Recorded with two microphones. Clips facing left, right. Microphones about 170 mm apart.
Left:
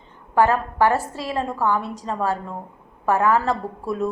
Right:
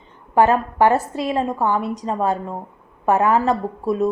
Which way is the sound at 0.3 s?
20° right (ahead or behind).